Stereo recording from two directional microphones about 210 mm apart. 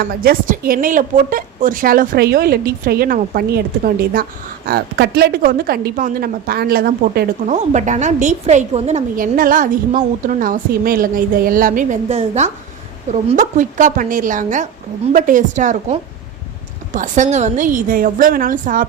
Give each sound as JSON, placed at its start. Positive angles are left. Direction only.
{"t": 0.0, "sound": "a woman's voice", "side_deg": -45}